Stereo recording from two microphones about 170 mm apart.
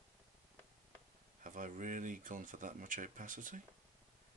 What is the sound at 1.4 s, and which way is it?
Speech, 50° right (ahead or behind).